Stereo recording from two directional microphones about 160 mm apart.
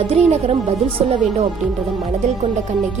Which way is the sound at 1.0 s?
35° right (ahead or behind).